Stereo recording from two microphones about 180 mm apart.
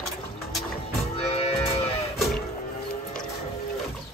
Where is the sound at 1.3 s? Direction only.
35° left (ahead or behind).